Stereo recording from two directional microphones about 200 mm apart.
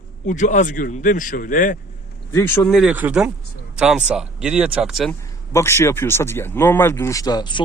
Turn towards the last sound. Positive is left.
turn(degrees=20)  # may be behind; listen again after turning